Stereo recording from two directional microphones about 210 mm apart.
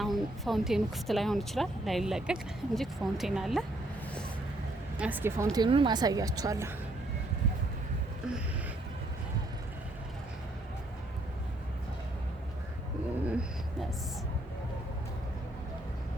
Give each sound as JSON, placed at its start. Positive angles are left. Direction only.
{"t": 0.0, "sound": "a woman's voice", "side_deg": 0}
{"t": 4.9, "sound": "speech", "side_deg": -10}